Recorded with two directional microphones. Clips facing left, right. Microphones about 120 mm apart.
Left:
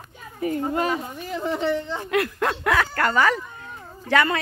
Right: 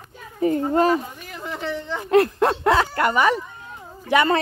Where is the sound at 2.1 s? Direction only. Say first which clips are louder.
Right 7 dB; 30° right (ahead or behind); by 4.3 s 15° right (ahead or behind).